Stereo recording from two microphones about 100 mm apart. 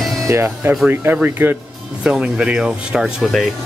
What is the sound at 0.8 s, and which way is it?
Speech, 15° right (ahead or behind).